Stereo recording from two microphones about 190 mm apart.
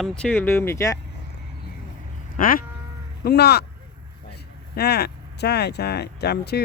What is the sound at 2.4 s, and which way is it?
Speech, 50° left (ahead or behind).